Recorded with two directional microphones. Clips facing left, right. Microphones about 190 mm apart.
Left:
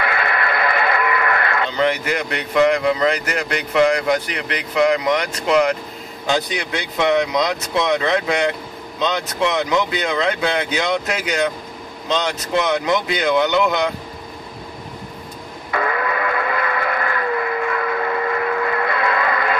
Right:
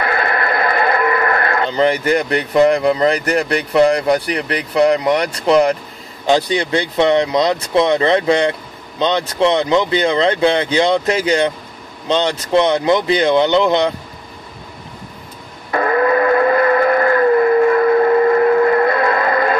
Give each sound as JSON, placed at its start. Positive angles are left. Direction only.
{"t": 0.0, "sound": "speech", "side_deg": -40}
{"t": 15.7, "sound": "steam whistle", "side_deg": -40}